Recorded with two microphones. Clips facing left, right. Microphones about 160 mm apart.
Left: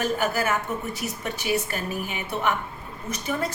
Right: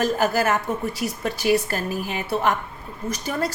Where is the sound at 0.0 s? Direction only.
35° right (ahead or behind).